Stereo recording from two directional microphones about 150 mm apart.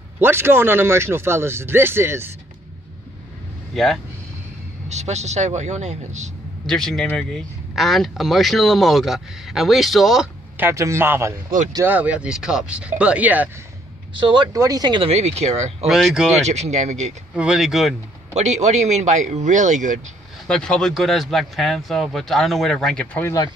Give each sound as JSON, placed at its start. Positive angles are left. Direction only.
{"t": 0.2, "sound": "speech", "side_deg": -15}
{"t": 3.7, "sound": "speech", "side_deg": 0}
{"t": 4.8, "sound": "speech", "side_deg": -50}
{"t": 6.6, "sound": "speech", "side_deg": 5}
{"t": 10.6, "sound": "speech", "side_deg": -20}
{"t": 14.2, "sound": "speech", "side_deg": -30}
{"t": 15.0, "sound": "speech", "side_deg": -45}
{"t": 15.9, "sound": "speech", "side_deg": 0}
{"t": 16.3, "sound": "speech", "side_deg": -50}
{"t": 17.4, "sound": "speech", "side_deg": -5}
{"t": 18.3, "sound": "speech", "side_deg": -50}
{"t": 20.4, "sound": "speech", "side_deg": 5}
{"t": 23.2, "sound": "speech", "side_deg": 25}